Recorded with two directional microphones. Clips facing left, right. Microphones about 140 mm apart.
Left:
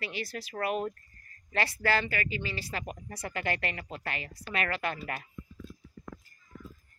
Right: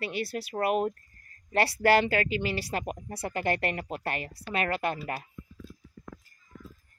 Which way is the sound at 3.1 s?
35° right (ahead or behind).